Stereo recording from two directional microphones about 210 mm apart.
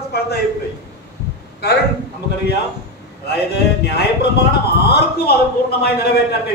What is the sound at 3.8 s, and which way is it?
A man's voice, 50° left (ahead or behind).